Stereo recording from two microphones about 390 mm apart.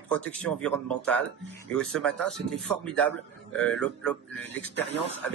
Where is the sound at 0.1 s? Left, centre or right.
Centre.